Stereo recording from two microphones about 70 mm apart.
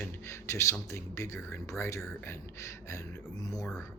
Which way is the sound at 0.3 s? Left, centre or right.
Left.